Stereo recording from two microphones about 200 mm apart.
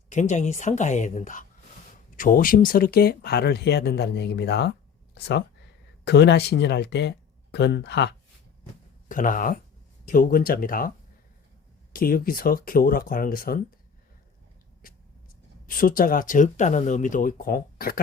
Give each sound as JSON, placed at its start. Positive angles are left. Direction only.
{"t": 0.1, "sound": "speech", "side_deg": 35}
{"t": 9.0, "sound": "speech", "side_deg": 40}
{"t": 11.9, "sound": "speech", "side_deg": 45}
{"t": 14.8, "sound": "vehicle", "side_deg": 45}
{"t": 15.6, "sound": "speech", "side_deg": 45}